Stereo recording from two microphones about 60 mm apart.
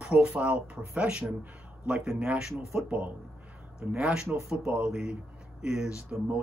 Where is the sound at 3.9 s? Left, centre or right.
Centre.